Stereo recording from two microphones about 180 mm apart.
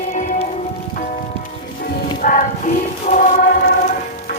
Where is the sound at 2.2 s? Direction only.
50° left (ahead or behind).